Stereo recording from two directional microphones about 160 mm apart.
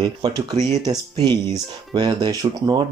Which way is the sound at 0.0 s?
25° right (ahead or behind).